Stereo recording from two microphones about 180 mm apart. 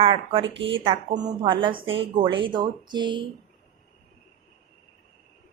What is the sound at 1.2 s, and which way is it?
Speech, 25° right (ahead or behind).